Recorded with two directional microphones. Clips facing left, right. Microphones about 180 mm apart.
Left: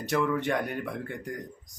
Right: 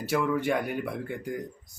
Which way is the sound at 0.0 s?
10° right (ahead or behind).